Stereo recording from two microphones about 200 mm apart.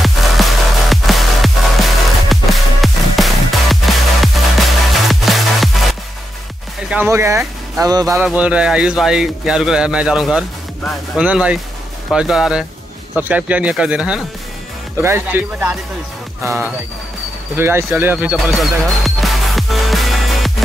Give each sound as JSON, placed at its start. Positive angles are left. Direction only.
{"t": 0.0, "sound": "music", "side_deg": 0}
{"t": 6.9, "sound": "speech", "side_deg": -10}
{"t": 8.3, "sound": "speech", "side_deg": -5}
{"t": 17.6, "sound": "music", "side_deg": -10}